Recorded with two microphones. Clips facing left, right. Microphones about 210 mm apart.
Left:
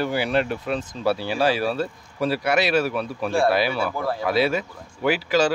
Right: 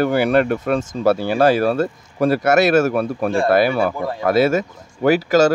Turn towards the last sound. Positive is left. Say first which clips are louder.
# right 6 dB
turn(degrees=-45)  # may be behind; listen again after turning